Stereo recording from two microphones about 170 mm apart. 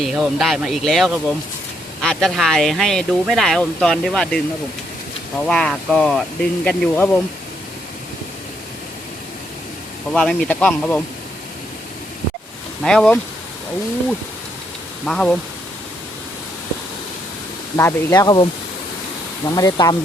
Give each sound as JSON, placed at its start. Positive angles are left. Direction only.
{"t": 0.0, "sound": "speech", "side_deg": 0}
{"t": 5.5, "sound": "speech", "side_deg": 5}
{"t": 10.1, "sound": "a man's voice", "side_deg": 5}
{"t": 12.8, "sound": "speech", "side_deg": 5}
{"t": 15.0, "sound": "speech", "side_deg": 5}
{"t": 17.7, "sound": "speech", "side_deg": 20}
{"t": 19.5, "sound": "speech", "side_deg": 20}